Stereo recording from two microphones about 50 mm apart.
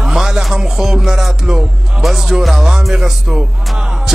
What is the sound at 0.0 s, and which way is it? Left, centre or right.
Music, centre.